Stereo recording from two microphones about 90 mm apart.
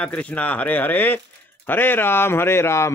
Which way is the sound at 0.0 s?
15° left (ahead or behind).